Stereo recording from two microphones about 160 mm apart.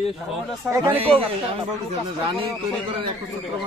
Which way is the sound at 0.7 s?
Centre (ahead or behind).